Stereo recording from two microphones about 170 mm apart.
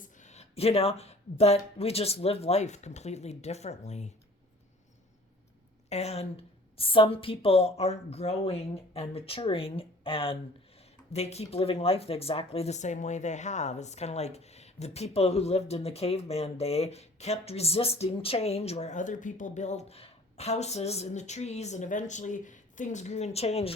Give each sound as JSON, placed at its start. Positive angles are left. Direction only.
{"t": 0.0, "sound": "speech", "side_deg": 45}
{"t": 5.9, "sound": "speech", "side_deg": 40}